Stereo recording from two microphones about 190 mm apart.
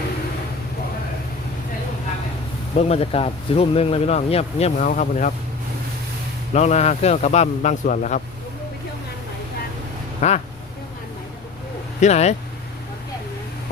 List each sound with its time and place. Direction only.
2.7 s speech: 30° left (ahead or behind)
6.5 s speech: 35° left (ahead or behind)
10.2 s speech: 35° left (ahead or behind)
11.9 s speech: 35° left (ahead or behind)